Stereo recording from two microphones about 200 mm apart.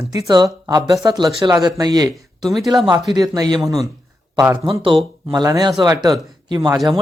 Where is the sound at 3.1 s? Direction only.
20° right (ahead or behind).